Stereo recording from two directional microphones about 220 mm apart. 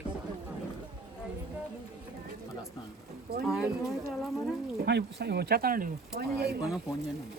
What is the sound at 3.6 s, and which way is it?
Speech, centre (ahead or behind).